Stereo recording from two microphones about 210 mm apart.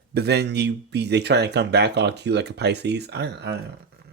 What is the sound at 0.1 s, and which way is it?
Speech, 50° right (ahead or behind).